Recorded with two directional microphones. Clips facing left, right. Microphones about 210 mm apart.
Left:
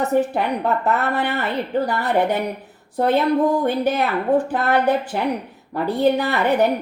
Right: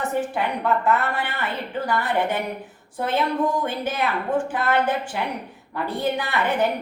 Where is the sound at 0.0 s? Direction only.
40° left (ahead or behind).